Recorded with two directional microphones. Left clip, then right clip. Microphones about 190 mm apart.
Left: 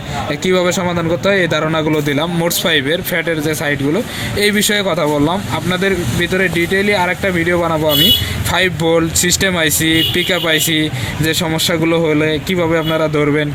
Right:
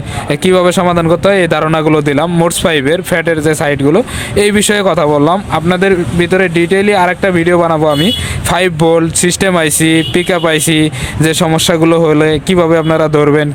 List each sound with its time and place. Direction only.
0.3 s a man's voice: 55° right (ahead or behind)